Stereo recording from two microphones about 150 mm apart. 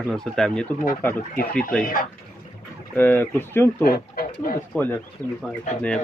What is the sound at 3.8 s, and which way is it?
Speech, 80° left.